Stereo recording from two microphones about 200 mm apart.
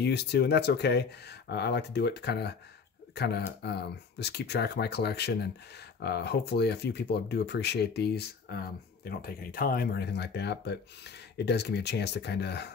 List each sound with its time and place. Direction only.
0.0 s speech: 55° left (ahead or behind)